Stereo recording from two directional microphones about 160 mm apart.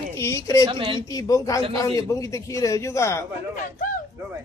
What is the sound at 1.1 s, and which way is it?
A man's voice, 20° left (ahead or behind).